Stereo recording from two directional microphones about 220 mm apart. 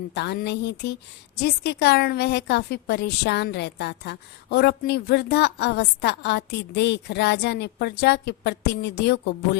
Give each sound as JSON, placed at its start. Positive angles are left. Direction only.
{"t": 0.1, "sound": "a woman's voice", "side_deg": 50}